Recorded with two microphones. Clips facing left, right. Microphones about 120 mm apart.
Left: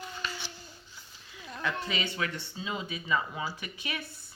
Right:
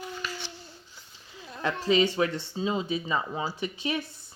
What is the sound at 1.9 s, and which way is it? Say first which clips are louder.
Speech: right 10 dB; 30° right (ahead or behind).